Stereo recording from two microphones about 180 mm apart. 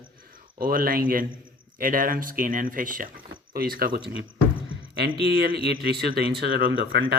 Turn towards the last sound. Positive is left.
turn(degrees=-55)  # may be behind; listen again after turning